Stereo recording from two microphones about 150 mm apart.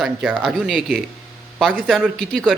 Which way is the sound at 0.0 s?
10° right (ahead or behind).